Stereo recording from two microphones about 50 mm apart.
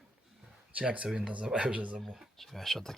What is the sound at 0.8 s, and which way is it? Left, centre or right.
Speech, right.